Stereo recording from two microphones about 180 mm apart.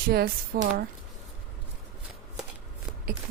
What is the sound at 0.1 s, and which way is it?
Speech, 60° right (ahead or behind).